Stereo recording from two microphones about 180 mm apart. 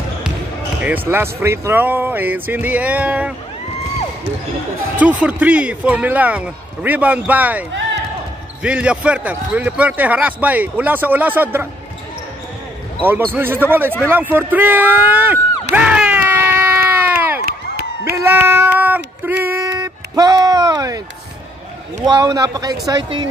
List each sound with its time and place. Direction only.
0.8 s speech: 10° right (ahead or behind)
4.9 s speech: 10° right (ahead or behind)
8.6 s speech: 5° right (ahead or behind)
13.0 s speech: 10° right (ahead or behind)
15.7 s a sound: 5° right (ahead or behind)
17.5 s a sound: 55° right (ahead or behind)
18.1 s child singing: 15° right (ahead or behind)
19.2 s a sound: 10° right (ahead or behind)
22.1 s a man's voice: 20° right (ahead or behind)